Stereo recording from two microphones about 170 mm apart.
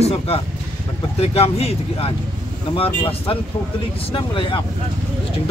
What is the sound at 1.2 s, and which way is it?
Speech, 35° left (ahead or behind).